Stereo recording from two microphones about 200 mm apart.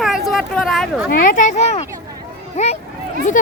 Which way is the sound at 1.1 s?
45° left (ahead or behind).